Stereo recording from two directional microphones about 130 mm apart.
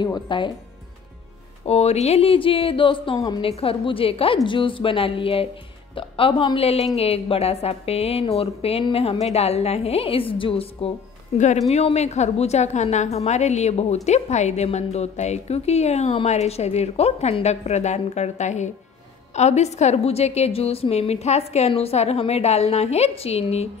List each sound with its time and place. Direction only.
0.0 s speech: 35° left (ahead or behind)
1.7 s a woman's voice: 55° left (ahead or behind)
11.3 s a woman's voice: 65° left (ahead or behind)